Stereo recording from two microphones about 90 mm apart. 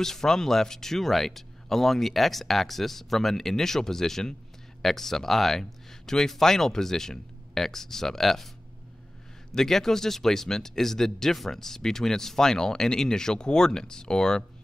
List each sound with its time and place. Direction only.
0.0 s speech: 5° left (ahead or behind)
9.5 s speech: 5° left (ahead or behind)